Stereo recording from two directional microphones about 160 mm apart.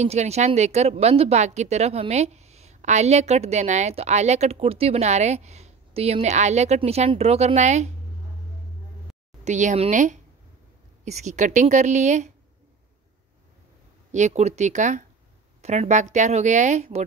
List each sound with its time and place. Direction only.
0.0 s a woman's voice: 45° right (ahead or behind)
9.4 s a woman's voice: 50° right (ahead or behind)
14.1 s a woman's voice: 45° right (ahead or behind)